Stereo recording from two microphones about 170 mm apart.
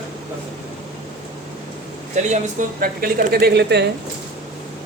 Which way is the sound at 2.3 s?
55° right (ahead or behind).